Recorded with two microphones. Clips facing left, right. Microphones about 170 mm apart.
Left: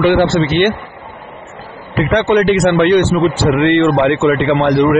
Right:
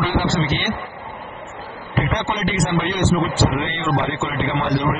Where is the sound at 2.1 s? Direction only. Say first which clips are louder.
Left 16 dB; 75° left (ahead or behind).